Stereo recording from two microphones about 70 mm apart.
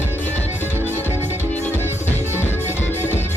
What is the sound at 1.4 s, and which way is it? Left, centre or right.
Music, left.